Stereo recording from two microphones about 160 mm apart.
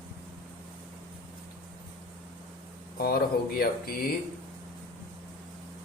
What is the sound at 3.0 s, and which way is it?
Speech, 70° left (ahead or behind).